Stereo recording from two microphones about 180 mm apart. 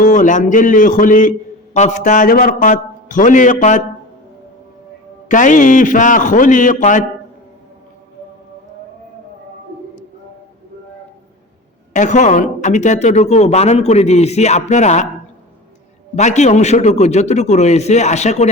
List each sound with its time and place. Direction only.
0.0 s a man's voice: 45° left (ahead or behind)
5.3 s a man's voice: 45° left (ahead or behind)
11.9 s speech: 40° left (ahead or behind)
16.1 s speech: 40° left (ahead or behind)